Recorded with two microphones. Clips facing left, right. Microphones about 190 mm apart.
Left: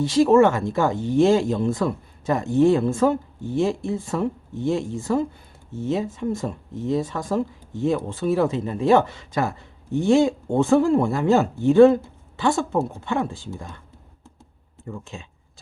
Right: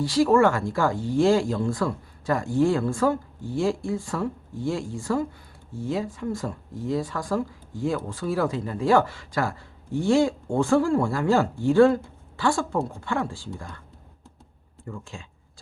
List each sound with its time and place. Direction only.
0.0 s speech: 20° left (ahead or behind)
14.8 s speech: 20° left (ahead or behind)